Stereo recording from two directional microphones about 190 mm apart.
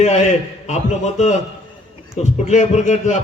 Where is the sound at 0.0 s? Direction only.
35° left (ahead or behind).